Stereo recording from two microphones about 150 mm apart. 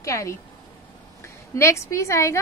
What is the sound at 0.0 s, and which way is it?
Speech, 20° left (ahead or behind).